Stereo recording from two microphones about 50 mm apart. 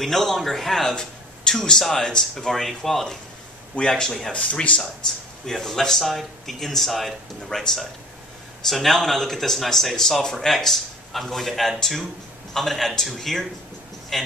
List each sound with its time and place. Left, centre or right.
0.0 s speech: centre
4.3 s speech: left
5.5 s speech: centre